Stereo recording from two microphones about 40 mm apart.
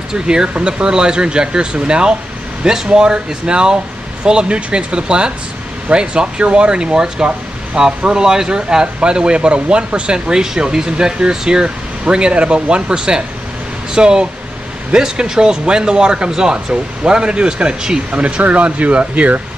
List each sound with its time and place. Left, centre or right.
0.1 s speech: centre
18.2 s speech: right